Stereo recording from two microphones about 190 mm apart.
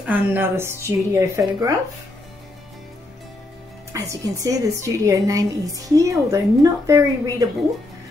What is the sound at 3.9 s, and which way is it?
A woman's voice, 15° right (ahead or behind).